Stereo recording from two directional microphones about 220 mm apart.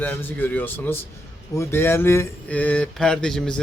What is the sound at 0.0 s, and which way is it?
Speech, 10° left (ahead or behind).